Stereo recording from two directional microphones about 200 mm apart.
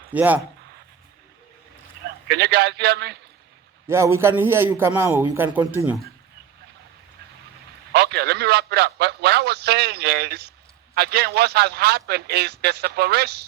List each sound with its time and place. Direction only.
0.1 s speech: 10° right (ahead or behind)
2.2 s a man's voice: 55° right (ahead or behind)
3.8 s a man's voice: 15° right (ahead or behind)
7.9 s a man's voice: 55° right (ahead or behind)